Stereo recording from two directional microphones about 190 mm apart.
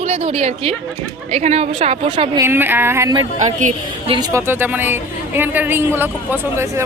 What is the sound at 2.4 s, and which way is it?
Speech, 10° right (ahead or behind).